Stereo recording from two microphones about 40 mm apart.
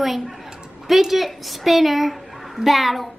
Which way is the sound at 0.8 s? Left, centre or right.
Centre.